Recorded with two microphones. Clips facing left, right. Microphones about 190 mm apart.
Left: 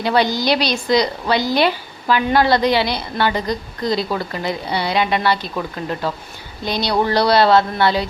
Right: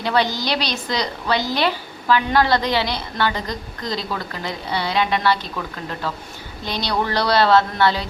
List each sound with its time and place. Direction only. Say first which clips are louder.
0.0 s a woman's voice: left 3 dB; 10° left (ahead or behind)